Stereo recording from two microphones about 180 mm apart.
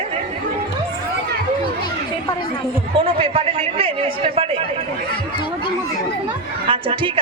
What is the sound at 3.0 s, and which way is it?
A man's voice, 30° right (ahead or behind).